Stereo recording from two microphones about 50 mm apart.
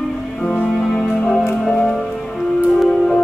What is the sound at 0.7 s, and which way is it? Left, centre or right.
Music, centre.